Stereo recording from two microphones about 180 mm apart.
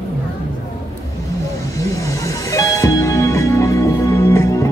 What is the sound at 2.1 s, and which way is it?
Music, 15° left (ahead or behind).